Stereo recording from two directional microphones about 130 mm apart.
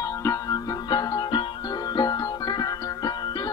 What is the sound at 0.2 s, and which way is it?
Music, 25° left (ahead or behind).